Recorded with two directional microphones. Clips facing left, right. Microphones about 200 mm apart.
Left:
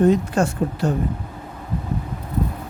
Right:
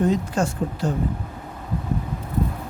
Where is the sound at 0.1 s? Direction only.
60° left (ahead or behind).